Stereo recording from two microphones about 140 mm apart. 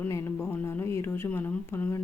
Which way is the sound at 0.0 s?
20° left (ahead or behind).